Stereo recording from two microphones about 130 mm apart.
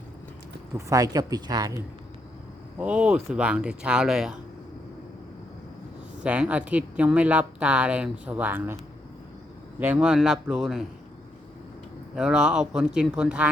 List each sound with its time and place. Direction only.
0.8 s speech: 25° right (ahead or behind)
2.7 s a woman's voice: 10° right (ahead or behind)
6.2 s a woman's voice: 10° right (ahead or behind)
9.8 s speech: 10° right (ahead or behind)
12.1 s a woman's voice: 5° right (ahead or behind)